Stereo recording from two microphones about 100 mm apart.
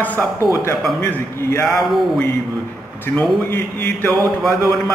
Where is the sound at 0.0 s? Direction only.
15° left (ahead or behind).